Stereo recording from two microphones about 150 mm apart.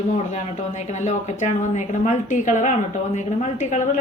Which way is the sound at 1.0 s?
55° left (ahead or behind).